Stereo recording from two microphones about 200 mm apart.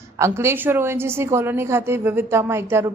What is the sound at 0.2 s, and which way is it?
A woman's voice, 15° right (ahead or behind).